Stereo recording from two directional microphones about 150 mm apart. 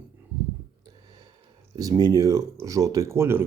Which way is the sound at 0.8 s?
25° right (ahead or behind).